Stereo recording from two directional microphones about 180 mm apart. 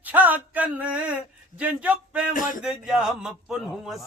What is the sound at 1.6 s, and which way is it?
A man's voice, 10° right (ahead or behind).